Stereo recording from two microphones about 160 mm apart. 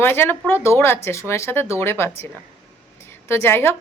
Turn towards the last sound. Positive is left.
turn(degrees=15)  # may be behind; listen again after turning